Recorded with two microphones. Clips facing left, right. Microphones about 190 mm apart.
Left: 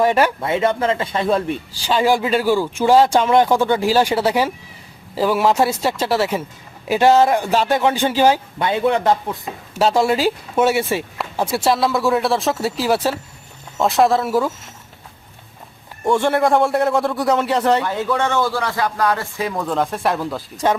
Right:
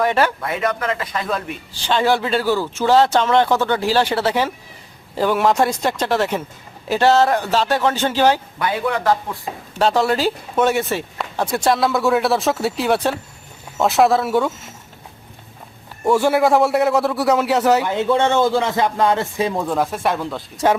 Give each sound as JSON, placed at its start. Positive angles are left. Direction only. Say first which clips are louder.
{"t": 0.0, "sound": "a man's voice", "louder": "left 2 dB", "side_deg": 15}
{"t": 0.3, "sound": "speech", "louder": "left 4 dB", "side_deg": 25}
{"t": 1.8, "sound": "a man's voice", "louder": "left 1 dB", "side_deg": 10}
{"t": 8.5, "sound": "speech", "louder": "left 3 dB", "side_deg": 25}
{"t": 9.7, "sound": "speech", "louder": "left 1 dB", "side_deg": 10}
{"t": 16.0, "sound": "speech", "louder": "right 1 dB", "side_deg": -5}
{"t": 17.8, "sound": "speech", "louder": "right 3 dB", "side_deg": -20}
{"t": 19.6, "sound": "speech", "louder": "even", "side_deg": -5}